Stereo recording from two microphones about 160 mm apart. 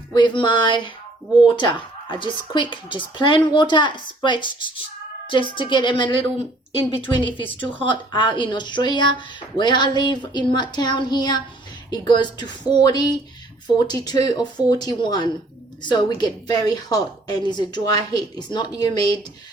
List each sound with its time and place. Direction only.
0.1 s a woman's voice: 30° left (ahead or behind)